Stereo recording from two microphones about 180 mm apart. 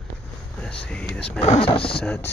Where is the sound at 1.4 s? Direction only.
35° left (ahead or behind).